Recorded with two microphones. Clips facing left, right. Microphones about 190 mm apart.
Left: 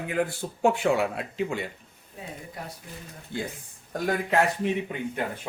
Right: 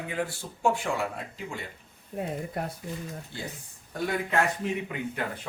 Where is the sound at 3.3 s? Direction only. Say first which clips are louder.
Left 9 dB; 50° left (ahead or behind).